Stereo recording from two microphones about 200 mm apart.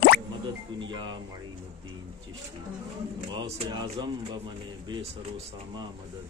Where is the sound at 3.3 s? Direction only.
25° right (ahead or behind).